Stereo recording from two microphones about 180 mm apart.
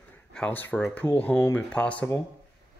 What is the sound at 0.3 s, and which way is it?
Speech, 5° left (ahead or behind).